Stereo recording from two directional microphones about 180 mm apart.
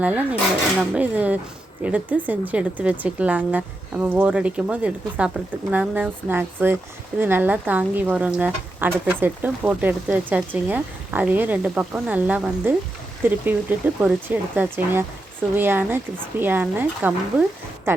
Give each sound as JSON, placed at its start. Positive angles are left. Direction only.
{"t": 0.0, "sound": "a woman's voice", "side_deg": -10}